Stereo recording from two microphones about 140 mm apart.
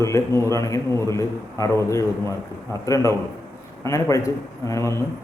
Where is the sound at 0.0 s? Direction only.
20° left (ahead or behind).